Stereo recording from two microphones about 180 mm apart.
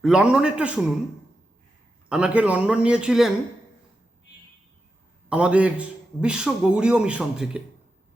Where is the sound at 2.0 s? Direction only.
5° right (ahead or behind).